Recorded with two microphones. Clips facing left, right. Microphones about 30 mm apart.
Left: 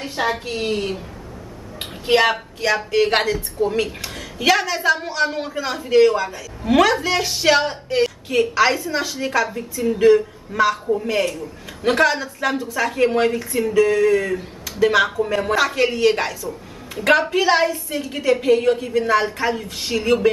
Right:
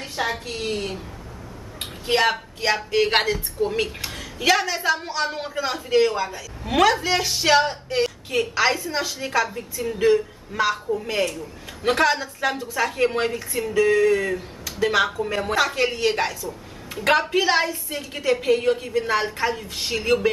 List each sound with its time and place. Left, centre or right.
0.0 s a woman's voice: centre
1.8 s a sound: centre
2.6 s a man's voice: centre
4.4 s a man's voice: centre